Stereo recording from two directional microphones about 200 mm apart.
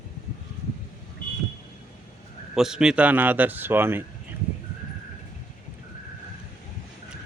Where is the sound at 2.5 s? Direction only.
5° right (ahead or behind).